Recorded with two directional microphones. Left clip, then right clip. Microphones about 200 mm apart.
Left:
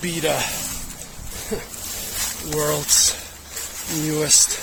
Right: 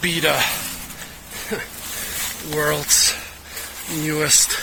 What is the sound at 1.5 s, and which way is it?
Speech, 10° left (ahead or behind).